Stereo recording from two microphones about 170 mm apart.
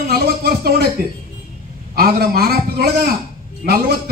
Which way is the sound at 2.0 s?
60° right (ahead or behind).